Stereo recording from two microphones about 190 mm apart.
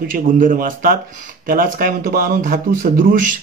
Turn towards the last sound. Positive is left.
turn(degrees=-45)  # may be behind; listen again after turning